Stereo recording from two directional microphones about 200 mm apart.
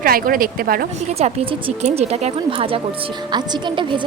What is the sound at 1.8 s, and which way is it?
A woman's voice, 30° right (ahead or behind).